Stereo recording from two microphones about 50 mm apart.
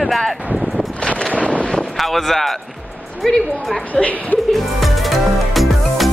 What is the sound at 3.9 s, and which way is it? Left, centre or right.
Speech, left.